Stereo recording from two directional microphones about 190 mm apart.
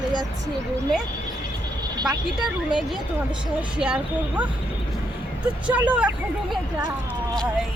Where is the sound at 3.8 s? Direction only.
5° right (ahead or behind).